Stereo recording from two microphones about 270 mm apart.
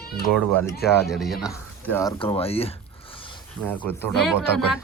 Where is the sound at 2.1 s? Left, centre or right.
Left.